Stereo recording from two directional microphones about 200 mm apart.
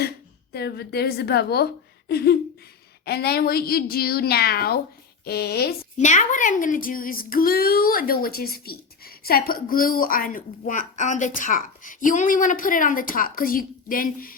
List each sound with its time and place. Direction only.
0.5 s speech: 55° left (ahead or behind)
6.0 s speech: 40° left (ahead or behind)